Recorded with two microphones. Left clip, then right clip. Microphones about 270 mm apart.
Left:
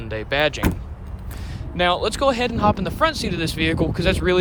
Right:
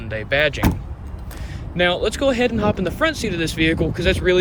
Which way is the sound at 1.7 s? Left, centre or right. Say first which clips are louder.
Right 1 dB; centre.